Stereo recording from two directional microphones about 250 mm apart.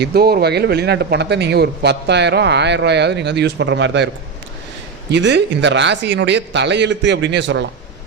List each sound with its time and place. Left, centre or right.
0.0 s speech: right
5.1 s speech: right